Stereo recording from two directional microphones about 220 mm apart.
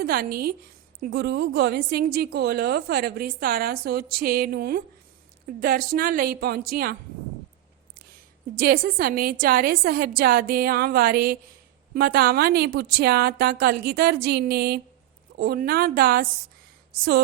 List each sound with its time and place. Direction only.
0.0 s a woman's voice: 45° right (ahead or behind)
8.5 s a woman's voice: 40° right (ahead or behind)